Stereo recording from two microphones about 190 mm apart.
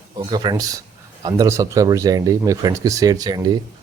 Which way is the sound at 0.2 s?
20° right (ahead or behind).